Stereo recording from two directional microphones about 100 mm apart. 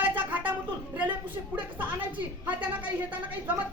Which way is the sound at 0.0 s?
15° right (ahead or behind).